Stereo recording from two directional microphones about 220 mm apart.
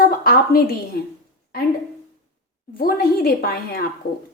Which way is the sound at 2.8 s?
45° left (ahead or behind).